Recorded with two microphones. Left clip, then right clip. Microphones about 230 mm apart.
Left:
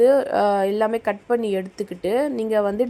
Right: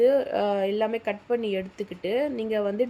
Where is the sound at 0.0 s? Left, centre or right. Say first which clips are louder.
Left 5 dB; centre.